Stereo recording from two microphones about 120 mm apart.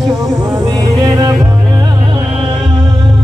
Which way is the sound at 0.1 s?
30° right (ahead or behind).